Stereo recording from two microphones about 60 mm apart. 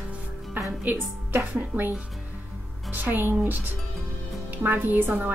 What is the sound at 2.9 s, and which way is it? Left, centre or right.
Speech, right.